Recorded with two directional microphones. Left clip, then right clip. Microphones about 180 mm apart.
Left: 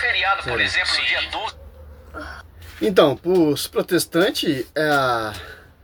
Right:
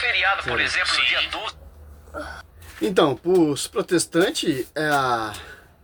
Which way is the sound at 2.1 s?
35° right (ahead or behind).